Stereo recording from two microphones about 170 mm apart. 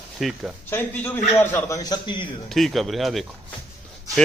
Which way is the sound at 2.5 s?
Centre (ahead or behind).